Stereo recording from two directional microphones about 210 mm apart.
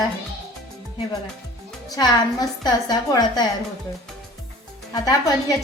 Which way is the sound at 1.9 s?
20° left (ahead or behind).